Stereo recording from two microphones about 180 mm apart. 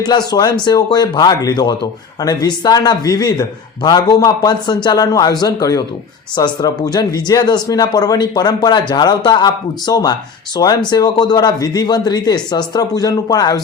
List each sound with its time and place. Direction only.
0.0 s speech: 25° left (ahead or behind)